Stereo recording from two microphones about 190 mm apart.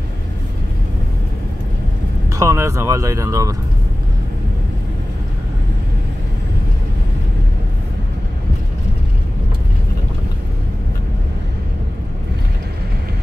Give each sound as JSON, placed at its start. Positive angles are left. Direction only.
{"t": 2.3, "sound": "speech", "side_deg": -15}